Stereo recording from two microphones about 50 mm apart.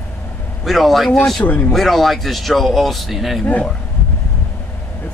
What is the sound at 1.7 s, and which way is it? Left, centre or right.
Speech, centre.